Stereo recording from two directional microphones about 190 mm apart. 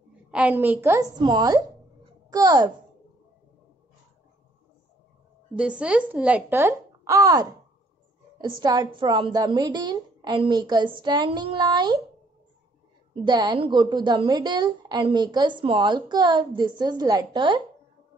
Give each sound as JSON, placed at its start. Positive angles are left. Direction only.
{"t": 0.3, "sound": "a woman's voice", "side_deg": -5}
{"t": 5.6, "sound": "a woman's voice", "side_deg": -5}
{"t": 13.2, "sound": "a woman's voice", "side_deg": -20}